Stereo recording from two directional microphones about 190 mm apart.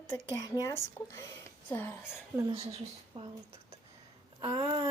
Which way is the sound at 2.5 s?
30° right (ahead or behind).